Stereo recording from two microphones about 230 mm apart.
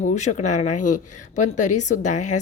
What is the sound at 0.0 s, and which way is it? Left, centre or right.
A woman's voice, left.